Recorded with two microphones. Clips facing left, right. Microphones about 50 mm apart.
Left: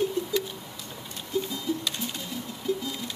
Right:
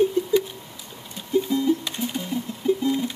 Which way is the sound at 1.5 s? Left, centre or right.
Right.